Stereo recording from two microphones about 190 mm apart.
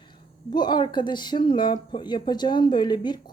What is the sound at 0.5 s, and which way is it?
Speech, 20° left (ahead or behind).